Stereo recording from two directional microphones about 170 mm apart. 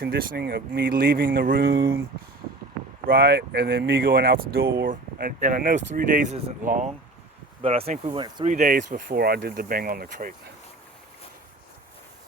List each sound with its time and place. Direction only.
0.0 s speech: 60° right (ahead or behind)
3.1 s speech: 65° right (ahead or behind); by 6.9 s 45° right (ahead or behind)
7.6 s speech: 35° right (ahead or behind)
8.4 s speech: 50° right (ahead or behind)